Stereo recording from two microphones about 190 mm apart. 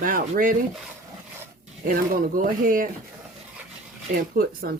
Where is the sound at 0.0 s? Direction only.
50° right (ahead or behind).